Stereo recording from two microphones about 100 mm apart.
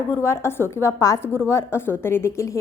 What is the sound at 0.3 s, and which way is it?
A woman's voice, 25° left (ahead or behind).